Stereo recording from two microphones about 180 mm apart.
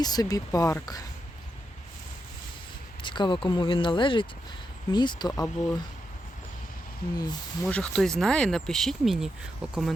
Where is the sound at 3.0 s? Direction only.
25° left (ahead or behind).